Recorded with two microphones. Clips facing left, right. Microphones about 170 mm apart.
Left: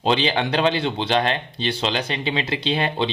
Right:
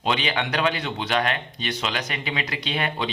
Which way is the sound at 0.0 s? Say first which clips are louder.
Left 5 dB; 30° left (ahead or behind).